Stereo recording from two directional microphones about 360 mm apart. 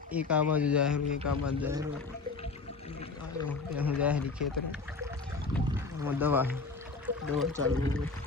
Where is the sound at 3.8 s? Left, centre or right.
Centre.